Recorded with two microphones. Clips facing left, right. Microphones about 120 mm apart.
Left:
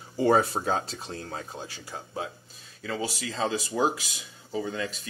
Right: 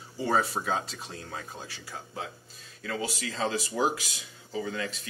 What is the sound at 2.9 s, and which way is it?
Speech, 25° left (ahead or behind).